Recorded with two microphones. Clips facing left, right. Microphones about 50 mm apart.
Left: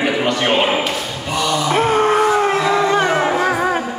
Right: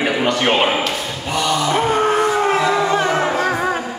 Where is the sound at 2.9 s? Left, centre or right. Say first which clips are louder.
Left 1 dB; left.